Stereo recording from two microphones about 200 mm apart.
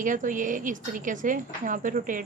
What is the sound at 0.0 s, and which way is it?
A woman's voice, 40° right (ahead or behind).